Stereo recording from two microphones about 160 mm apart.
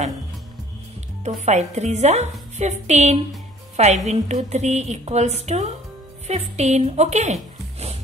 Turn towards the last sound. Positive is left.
turn(degrees=-45)  # may be behind; listen again after turning